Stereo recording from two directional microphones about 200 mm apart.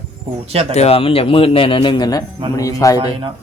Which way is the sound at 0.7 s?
30° left (ahead or behind).